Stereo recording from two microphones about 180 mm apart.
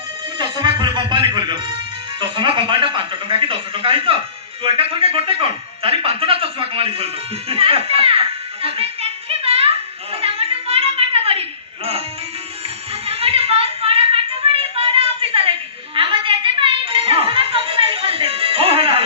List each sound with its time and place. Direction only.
0.3 s music: 25° right (ahead or behind)
2.3 s a man's voice: 25° right (ahead or behind)
8.6 s music: 30° right (ahead or behind)
12.9 s a sound: 30° right (ahead or behind)